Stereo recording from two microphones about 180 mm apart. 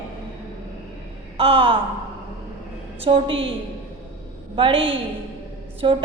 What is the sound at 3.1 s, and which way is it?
Speech, 30° right (ahead or behind).